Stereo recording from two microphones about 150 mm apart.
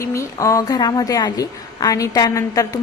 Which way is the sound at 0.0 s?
20° left (ahead or behind).